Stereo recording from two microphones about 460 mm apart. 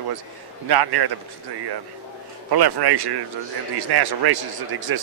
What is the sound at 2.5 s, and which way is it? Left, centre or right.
A man's voice, right.